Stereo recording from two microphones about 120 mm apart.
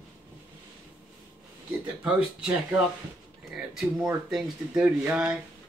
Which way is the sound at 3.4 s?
5° right (ahead or behind).